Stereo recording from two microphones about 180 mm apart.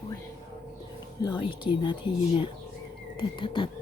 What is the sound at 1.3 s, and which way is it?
Speech, 25° left (ahead or behind).